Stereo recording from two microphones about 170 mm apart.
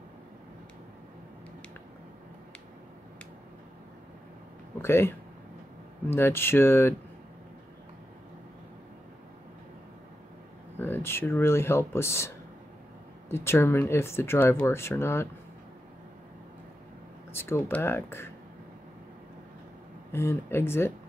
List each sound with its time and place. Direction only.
4.8 s speech: 15° left (ahead or behind)
10.8 s speech: 15° left (ahead or behind)
17.3 s speech: 15° left (ahead or behind)
20.1 s speech: 15° left (ahead or behind)